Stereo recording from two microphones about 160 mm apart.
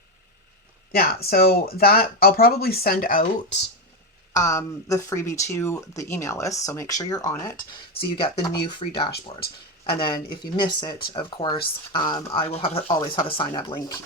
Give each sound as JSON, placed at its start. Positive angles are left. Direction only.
{"t": 0.9, "sound": "speech", "side_deg": 70}
{"t": 4.4, "sound": "speech", "side_deg": 20}
{"t": 7.9, "sound": "speech", "side_deg": 30}
{"t": 12.9, "sound": "speech", "side_deg": 30}